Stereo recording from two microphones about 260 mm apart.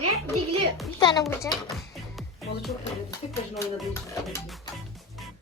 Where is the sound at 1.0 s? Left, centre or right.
Centre.